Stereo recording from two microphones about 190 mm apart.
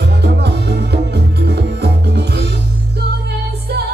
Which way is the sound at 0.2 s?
60° right (ahead or behind).